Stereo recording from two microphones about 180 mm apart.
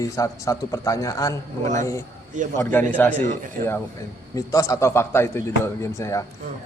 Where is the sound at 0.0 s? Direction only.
20° left (ahead or behind).